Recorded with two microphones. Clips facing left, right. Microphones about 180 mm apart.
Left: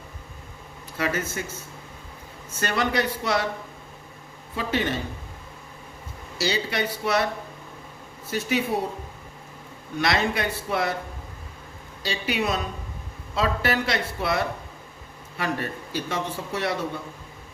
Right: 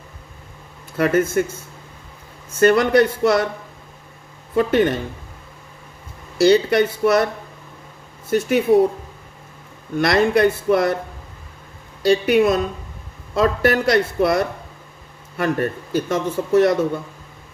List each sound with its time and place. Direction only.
0.9 s speech: 55° right (ahead or behind)
2.6 s speech: 50° right (ahead or behind)
4.5 s speech: 55° right (ahead or behind)
6.4 s speech: 50° right (ahead or behind)
8.3 s speech: 50° right (ahead or behind)
10.0 s speech: 55° right (ahead or behind)
12.0 s speech: 55° right (ahead or behind)